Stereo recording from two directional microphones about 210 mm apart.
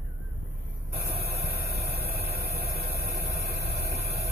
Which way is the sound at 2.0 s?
45° right (ahead or behind).